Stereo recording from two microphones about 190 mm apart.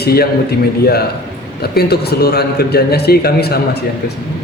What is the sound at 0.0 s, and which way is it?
Speech, 55° left (ahead or behind).